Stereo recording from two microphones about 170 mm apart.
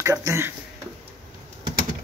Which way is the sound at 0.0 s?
20° right (ahead or behind).